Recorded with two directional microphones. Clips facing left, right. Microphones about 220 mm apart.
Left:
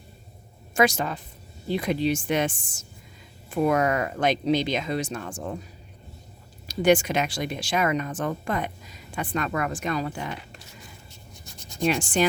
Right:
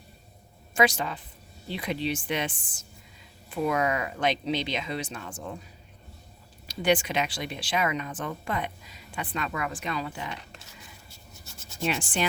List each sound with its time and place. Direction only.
0.7 s speech: 45° left (ahead or behind)
6.7 s speech: 45° left (ahead or behind)
11.8 s speech: 40° left (ahead or behind)